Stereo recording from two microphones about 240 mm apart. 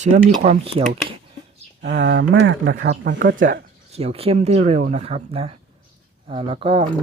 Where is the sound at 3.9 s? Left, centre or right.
Right.